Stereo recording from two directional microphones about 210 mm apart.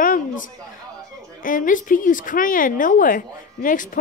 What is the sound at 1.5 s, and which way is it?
Speech, 40° left (ahead or behind).